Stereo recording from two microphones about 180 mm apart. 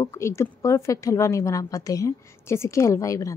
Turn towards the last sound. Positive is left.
turn(degrees=20)  # may be behind; listen again after turning